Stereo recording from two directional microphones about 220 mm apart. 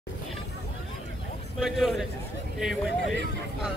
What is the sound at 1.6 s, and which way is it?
Speech, centre (ahead or behind).